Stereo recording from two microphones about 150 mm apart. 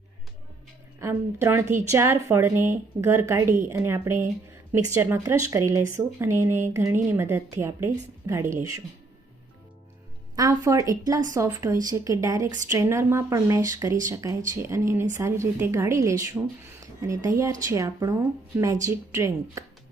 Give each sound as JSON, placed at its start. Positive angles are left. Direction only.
{"t": 0.9, "sound": "speech", "side_deg": -15}
{"t": 10.3, "sound": "a woman's voice", "side_deg": -25}